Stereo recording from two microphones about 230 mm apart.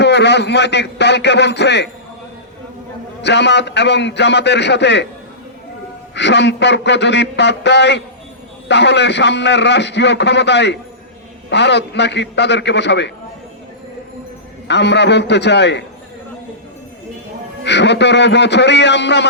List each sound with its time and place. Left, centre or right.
0.0 s a man's voice: left
3.2 s a man's voice: left
6.1 s a man's voice: left
14.7 s a man's voice: left
17.7 s a man's voice: left